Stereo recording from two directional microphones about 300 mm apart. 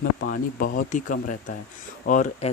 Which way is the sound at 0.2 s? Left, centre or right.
Left.